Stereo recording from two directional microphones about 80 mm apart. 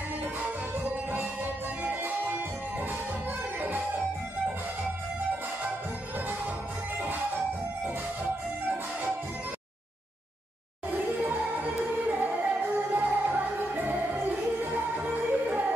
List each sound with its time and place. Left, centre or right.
1.8 s music: centre
12.1 s music: right